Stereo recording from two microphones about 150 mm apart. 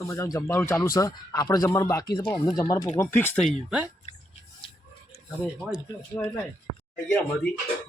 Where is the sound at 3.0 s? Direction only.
15° left (ahead or behind).